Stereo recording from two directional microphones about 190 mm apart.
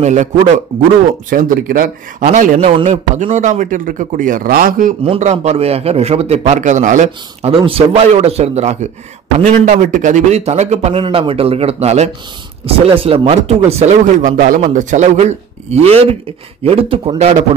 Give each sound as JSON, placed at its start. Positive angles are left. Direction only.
{"t": 0.0, "sound": "a man's voice", "side_deg": -40}
{"t": 1.3, "sound": "a man's voice", "side_deg": -45}
{"t": 2.6, "sound": "speech", "side_deg": -30}
{"t": 3.2, "sound": "a man's voice", "side_deg": -40}
{"t": 5.0, "sound": "a man's voice", "side_deg": -35}
{"t": 7.5, "sound": "a man's voice", "side_deg": -30}